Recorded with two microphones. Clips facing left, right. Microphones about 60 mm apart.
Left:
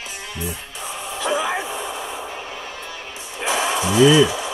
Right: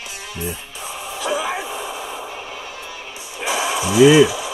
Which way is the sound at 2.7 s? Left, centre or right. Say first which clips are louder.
Even; centre.